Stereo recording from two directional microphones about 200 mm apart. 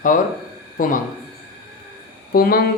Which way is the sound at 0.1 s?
40° left (ahead or behind).